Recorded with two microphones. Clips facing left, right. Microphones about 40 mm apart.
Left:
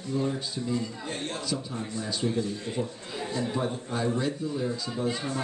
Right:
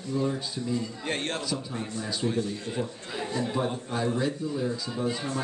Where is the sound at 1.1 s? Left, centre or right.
Right.